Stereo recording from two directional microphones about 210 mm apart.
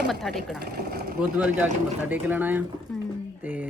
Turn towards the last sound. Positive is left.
turn(degrees=-10)  # may be behind; listen again after turning